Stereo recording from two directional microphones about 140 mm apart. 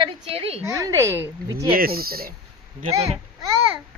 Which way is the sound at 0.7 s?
25° right (ahead or behind).